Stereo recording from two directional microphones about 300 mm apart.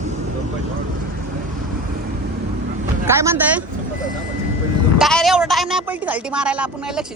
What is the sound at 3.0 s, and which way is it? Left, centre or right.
Speech, centre.